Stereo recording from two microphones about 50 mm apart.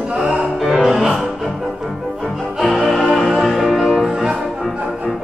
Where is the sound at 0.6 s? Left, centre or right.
Centre.